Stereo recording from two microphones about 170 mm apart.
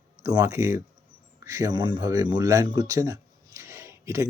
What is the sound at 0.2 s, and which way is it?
Speech, 15° right (ahead or behind).